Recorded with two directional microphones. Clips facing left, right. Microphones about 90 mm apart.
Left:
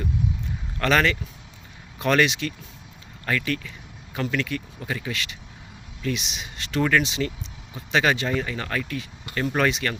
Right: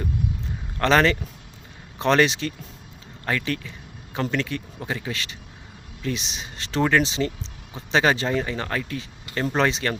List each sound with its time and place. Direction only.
0.8 s speech: 30° right (ahead or behind)